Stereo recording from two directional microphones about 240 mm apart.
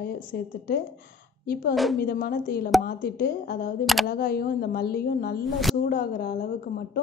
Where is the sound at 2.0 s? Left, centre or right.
Left.